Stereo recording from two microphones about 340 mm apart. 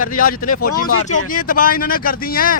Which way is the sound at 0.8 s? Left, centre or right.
Left.